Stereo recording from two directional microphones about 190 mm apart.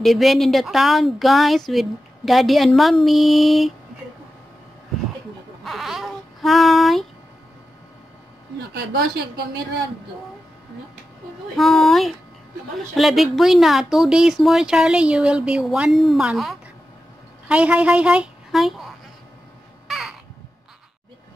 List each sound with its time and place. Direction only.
0.0 s speech: centre (ahead or behind)
5.6 s speech: centre (ahead or behind)
8.7 s a woman's voice: 55° right (ahead or behind)
11.5 s a woman's voice: centre (ahead or behind)
19.9 s caw: centre (ahead or behind)